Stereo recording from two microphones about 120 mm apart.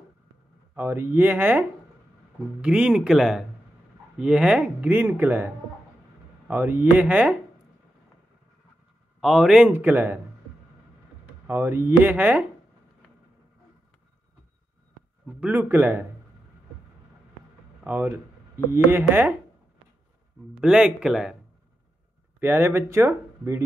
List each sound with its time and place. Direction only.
0.7 s speech: 20° right (ahead or behind)
9.2 s speech: 5° right (ahead or behind)
9.7 s speech: 15° right (ahead or behind)
11.4 s speech: 20° right (ahead or behind)
15.2 s speech: 10° right (ahead or behind)
17.8 s speech: 15° right (ahead or behind)
20.6 s speech: 5° right (ahead or behind)
22.4 s speech: 20° right (ahead or behind)